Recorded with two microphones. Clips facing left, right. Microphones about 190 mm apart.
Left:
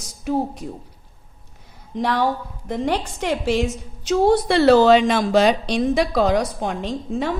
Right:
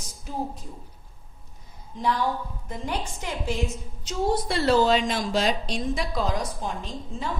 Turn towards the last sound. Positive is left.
turn(degrees=80)